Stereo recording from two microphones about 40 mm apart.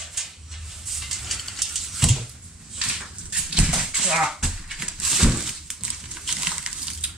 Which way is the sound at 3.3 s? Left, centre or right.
Centre.